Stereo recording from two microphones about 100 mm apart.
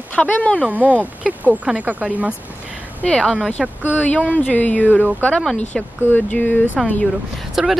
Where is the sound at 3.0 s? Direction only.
10° left (ahead or behind).